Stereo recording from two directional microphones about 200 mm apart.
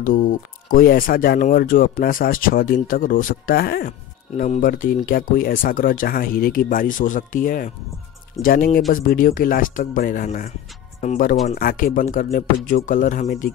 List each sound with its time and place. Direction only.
0.0 s speech: 45° left (ahead or behind)